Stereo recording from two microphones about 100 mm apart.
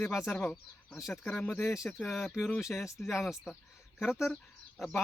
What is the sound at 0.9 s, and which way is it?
Speech, centre (ahead or behind).